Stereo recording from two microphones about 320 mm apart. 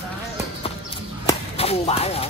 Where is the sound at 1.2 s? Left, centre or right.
Centre.